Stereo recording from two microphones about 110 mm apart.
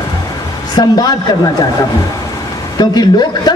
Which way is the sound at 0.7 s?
35° left (ahead or behind).